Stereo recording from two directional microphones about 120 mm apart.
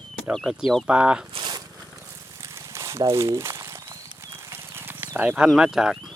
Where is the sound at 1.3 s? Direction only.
40° right (ahead or behind).